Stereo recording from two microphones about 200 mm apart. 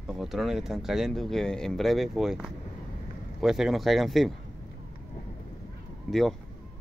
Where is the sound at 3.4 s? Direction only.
Centre (ahead or behind).